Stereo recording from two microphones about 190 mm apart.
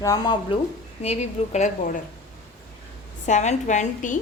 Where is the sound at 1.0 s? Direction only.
35° left (ahead or behind).